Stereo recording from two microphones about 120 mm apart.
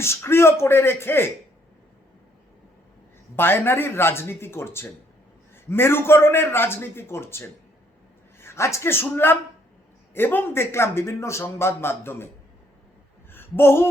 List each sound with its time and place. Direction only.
0.0 s a man's voice: 20° left (ahead or behind)
3.3 s a man's voice: 20° left (ahead or behind)
13.3 s a sound: 20° left (ahead or behind)